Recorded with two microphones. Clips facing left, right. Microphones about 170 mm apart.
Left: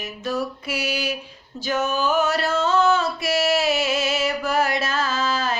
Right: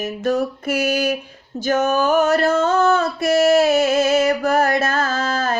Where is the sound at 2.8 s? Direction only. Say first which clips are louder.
Right 4 dB; 45° right (ahead or behind).